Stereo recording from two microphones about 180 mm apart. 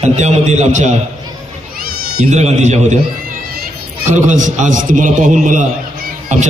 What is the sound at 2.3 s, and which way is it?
Speech, 40° right (ahead or behind).